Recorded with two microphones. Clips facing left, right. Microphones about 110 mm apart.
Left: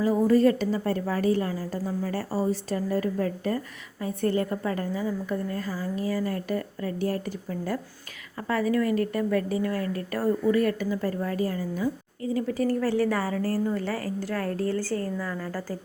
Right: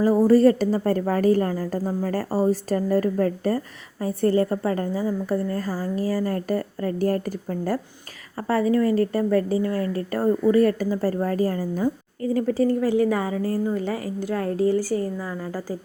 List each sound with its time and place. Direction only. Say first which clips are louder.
0.0 s a woman's voice: right 5 dB; 40° right (ahead or behind)
8.4 s a woman's voice: right 4 dB; 30° right (ahead or behind)
12.8 s a woman's voice: right 4 dB; 15° right (ahead or behind)